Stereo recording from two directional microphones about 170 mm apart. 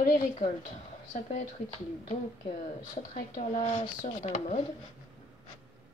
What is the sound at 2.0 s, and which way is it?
A woman's voice, 45° left (ahead or behind).